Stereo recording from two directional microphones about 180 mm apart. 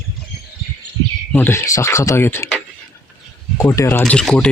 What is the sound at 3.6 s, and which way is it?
Speech, 15° left (ahead or behind).